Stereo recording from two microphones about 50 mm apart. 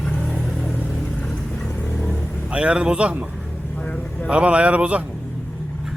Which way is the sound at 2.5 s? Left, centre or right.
Right.